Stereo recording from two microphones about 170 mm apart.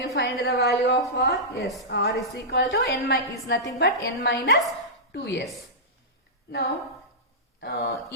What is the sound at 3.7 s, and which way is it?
A woman's voice, 80° left.